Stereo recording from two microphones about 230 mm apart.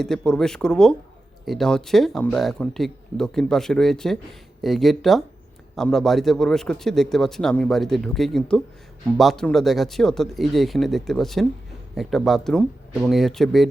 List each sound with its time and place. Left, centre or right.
0.0 s a man's voice: centre